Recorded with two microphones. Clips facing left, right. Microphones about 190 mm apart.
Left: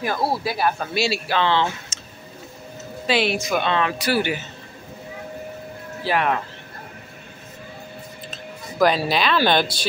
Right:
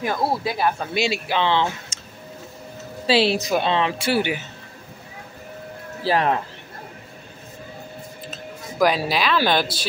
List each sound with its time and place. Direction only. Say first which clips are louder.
0.4 s speech: even; 20° right (ahead or behind)
3.1 s speech: right 2 dB; 30° right (ahead or behind)
6.0 s speech: right 1 dB; 30° right (ahead or behind)
8.3 s speech: right 1 dB; 10° right (ahead or behind)